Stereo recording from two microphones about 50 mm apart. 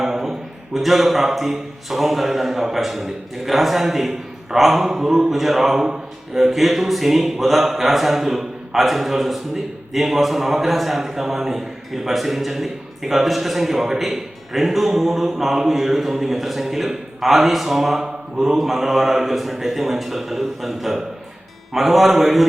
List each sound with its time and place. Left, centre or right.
0.0 s a man's voice: centre